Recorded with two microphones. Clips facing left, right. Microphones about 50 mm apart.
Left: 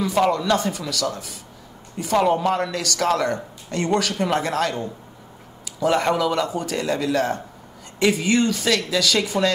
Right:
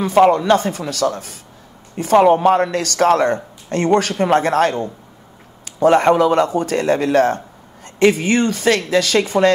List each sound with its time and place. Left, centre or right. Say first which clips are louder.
0.0 s speech: right 7 dB; right